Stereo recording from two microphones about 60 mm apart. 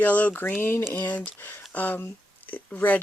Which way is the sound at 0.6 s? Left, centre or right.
Left.